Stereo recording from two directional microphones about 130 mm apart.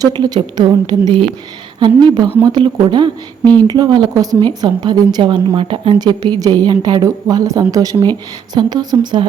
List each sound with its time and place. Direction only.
0.0 s a woman's voice: 30° right (ahead or behind)